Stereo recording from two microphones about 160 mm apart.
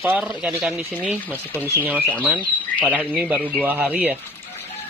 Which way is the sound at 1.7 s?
10° right (ahead or behind).